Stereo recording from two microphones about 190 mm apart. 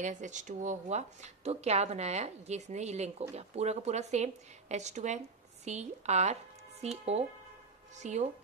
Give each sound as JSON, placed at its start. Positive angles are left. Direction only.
{"t": 0.0, "sound": "speech", "side_deg": -40}